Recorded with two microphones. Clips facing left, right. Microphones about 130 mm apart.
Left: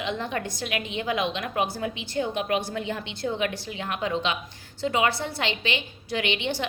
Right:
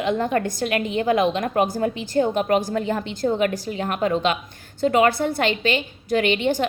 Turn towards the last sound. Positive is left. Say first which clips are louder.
# right 7 dB
turn(degrees=-45)  # may be behind; listen again after turning